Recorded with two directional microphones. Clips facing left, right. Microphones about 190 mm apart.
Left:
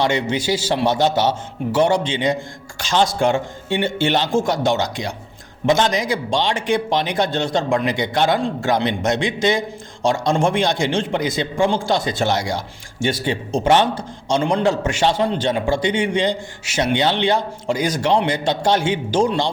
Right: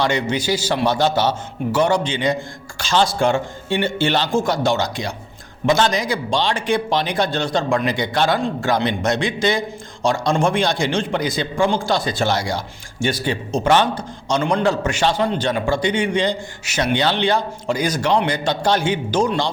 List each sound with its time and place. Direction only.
0.0 s a man's voice: 25° left (ahead or behind)